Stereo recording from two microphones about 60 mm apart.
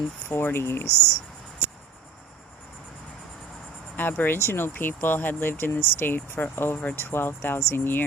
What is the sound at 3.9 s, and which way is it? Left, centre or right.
Speech, left.